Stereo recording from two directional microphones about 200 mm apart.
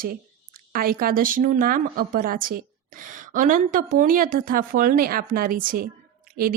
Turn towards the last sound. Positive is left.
turn(degrees=-45)  # may be behind; listen again after turning